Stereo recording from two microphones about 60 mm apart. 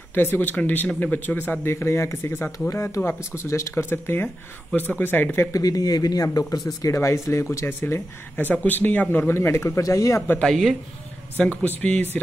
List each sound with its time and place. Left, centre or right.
0.1 s speech: left
1.7 s speech: left
2.7 s speech: left
3.7 s speech: left
5.5 s speech: left
6.8 s speech: left
8.4 s speech: left
9.3 s speech: left
10.4 s speech: centre
11.3 s speech: left